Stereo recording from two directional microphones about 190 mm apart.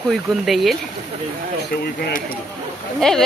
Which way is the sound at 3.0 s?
5° left (ahead or behind).